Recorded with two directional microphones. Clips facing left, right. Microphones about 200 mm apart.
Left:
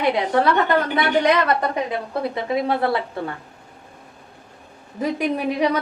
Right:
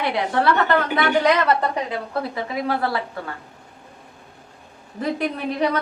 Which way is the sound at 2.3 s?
25° left (ahead or behind).